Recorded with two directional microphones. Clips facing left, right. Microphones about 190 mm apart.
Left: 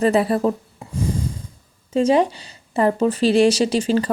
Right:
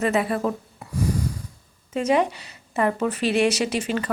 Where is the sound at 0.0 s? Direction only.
30° left (ahead or behind).